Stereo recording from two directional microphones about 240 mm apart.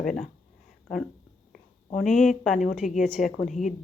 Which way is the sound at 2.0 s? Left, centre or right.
Centre.